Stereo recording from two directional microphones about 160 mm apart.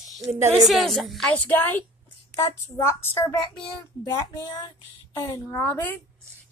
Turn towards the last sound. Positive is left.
turn(degrees=15)  # may be behind; listen again after turning